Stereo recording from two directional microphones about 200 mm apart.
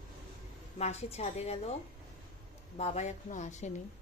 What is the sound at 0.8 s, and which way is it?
Speech, 35° left (ahead or behind).